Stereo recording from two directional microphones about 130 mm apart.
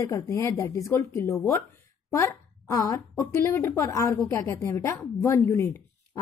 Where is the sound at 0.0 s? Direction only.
25° left (ahead or behind).